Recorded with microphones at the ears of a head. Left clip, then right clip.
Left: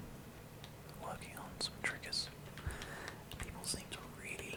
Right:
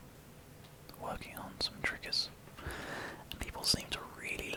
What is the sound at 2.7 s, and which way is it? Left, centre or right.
Whispering, right.